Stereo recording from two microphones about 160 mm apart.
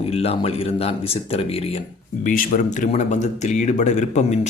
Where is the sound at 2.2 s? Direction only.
60° left (ahead or behind).